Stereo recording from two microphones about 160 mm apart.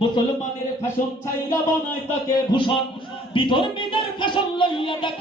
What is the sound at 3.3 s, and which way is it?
Speech, 30° left (ahead or behind).